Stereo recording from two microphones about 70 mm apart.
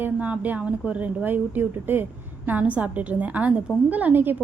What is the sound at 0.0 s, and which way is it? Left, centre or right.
A woman's voice, right.